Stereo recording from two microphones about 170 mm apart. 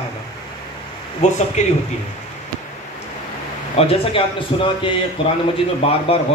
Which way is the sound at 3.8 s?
35° left (ahead or behind).